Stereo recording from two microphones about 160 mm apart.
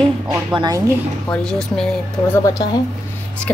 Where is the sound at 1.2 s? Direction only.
5° left (ahead or behind).